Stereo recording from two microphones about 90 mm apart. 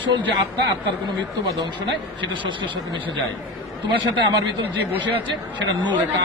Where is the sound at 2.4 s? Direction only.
65° right (ahead or behind).